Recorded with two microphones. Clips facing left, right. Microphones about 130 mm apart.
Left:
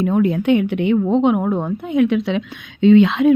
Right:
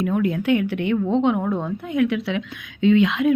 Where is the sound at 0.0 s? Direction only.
25° left (ahead or behind).